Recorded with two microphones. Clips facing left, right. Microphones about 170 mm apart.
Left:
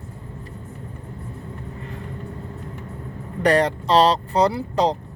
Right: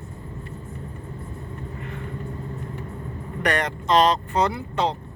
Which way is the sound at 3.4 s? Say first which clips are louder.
Left 7 dB; 30° left (ahead or behind).